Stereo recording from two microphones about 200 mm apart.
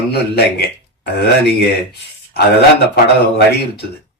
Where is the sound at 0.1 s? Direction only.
55° left (ahead or behind).